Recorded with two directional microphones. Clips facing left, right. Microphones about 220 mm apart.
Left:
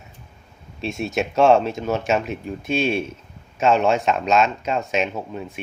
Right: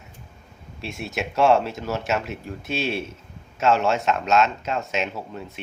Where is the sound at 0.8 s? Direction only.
20° left (ahead or behind).